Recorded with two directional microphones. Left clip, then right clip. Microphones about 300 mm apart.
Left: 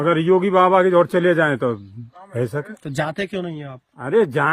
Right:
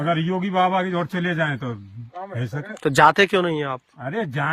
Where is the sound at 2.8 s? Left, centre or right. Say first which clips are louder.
Right 13 dB; centre.